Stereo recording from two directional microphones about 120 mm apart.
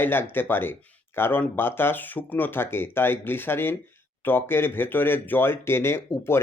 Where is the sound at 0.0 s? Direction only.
20° left (ahead or behind).